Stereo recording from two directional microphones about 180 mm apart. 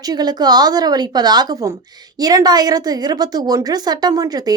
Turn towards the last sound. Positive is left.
turn(degrees=-20)  # may be behind; listen again after turning